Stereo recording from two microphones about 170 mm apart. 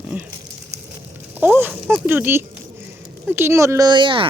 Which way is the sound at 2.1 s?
10° right (ahead or behind).